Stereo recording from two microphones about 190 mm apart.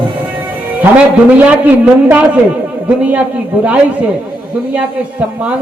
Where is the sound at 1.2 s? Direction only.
10° right (ahead or behind).